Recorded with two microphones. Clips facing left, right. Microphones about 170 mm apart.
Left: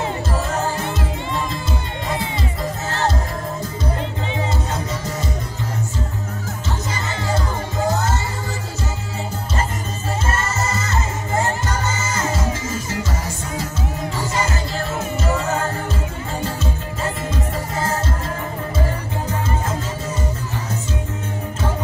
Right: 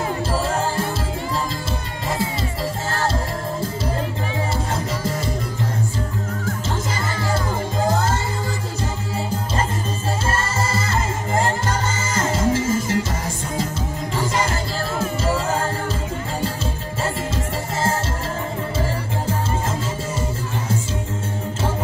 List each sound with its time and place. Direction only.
10.3 s music: 30° right (ahead or behind)
12.1 s music: 30° right (ahead or behind)